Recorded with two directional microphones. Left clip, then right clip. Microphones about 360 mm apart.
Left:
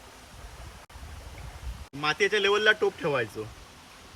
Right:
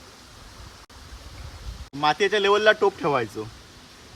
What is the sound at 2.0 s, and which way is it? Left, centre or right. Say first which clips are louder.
Speech: right 4 dB; centre.